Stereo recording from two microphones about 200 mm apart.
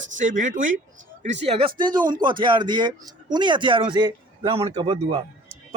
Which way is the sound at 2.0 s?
45° right (ahead or behind).